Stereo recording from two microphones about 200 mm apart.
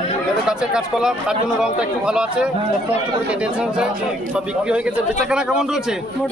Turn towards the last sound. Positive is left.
turn(degrees=-5)  # may be behind; listen again after turning